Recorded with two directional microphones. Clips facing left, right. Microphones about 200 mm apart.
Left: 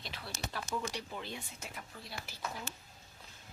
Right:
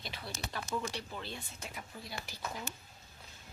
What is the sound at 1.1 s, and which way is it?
Speech, 15° left (ahead or behind).